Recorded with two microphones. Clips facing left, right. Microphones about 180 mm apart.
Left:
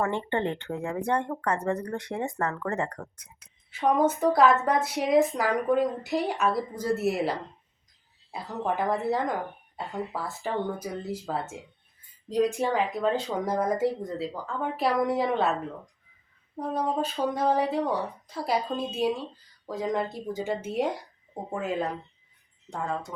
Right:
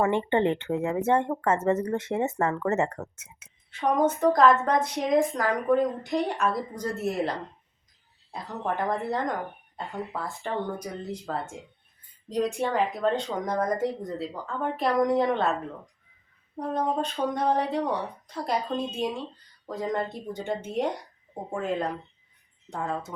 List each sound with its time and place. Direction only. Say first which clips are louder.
0.0 s speech: right 4 dB; 15° right (ahead or behind)
1.0 s speech: right 3 dB; 20° right (ahead or behind)
3.7 s speech: even; 5° left (ahead or behind)
16.6 s speech: right 1 dB; 5° left (ahead or behind)